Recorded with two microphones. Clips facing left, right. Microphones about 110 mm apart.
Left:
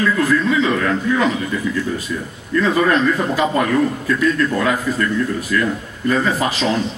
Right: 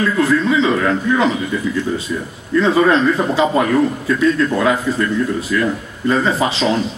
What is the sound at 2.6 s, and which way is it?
A man's voice, 30° right (ahead or behind).